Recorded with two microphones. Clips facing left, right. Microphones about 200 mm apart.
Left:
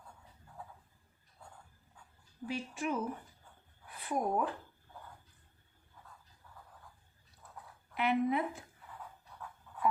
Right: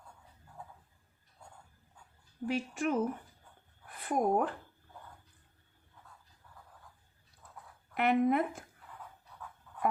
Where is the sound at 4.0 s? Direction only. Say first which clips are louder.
Right 4 dB; 55° right (ahead or behind).